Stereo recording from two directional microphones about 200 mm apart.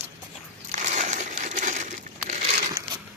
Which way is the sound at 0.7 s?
35° right (ahead or behind).